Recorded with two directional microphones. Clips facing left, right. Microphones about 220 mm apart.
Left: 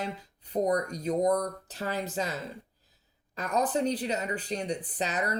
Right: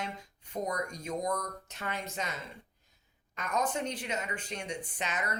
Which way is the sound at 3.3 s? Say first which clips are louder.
Left 5 dB; 35° left (ahead or behind).